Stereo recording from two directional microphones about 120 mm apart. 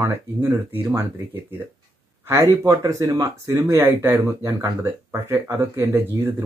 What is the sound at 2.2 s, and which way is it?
Speech, 25° right (ahead or behind).